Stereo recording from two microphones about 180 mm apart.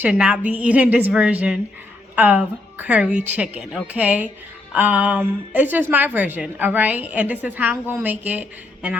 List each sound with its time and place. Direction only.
0.0 s a woman's voice: 5° right (ahead or behind)